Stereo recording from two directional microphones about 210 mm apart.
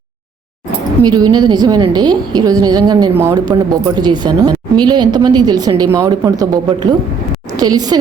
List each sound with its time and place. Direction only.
1.0 s a woman's voice: 20° right (ahead or behind)